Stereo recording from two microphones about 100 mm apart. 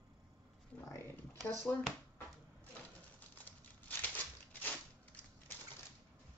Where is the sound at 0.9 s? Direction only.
25° left (ahead or behind).